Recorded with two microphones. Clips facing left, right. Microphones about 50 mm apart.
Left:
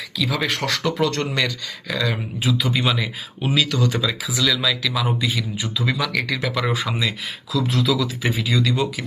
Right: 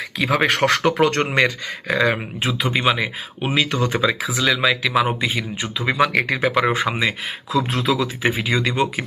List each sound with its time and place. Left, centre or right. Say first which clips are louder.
0.2 s speech: right 5 dB; right
7.5 s speech: right 1 dB; right
7.9 s speech: right 2 dB; right